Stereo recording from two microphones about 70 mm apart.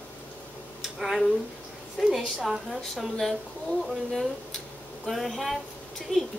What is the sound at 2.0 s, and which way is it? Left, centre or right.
A woman's voice, centre.